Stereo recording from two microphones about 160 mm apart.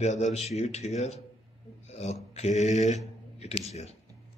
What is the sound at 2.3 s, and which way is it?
A man's voice, 45° left (ahead or behind).